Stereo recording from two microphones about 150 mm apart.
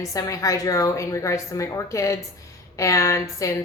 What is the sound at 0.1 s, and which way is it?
Speech, 20° left (ahead or behind).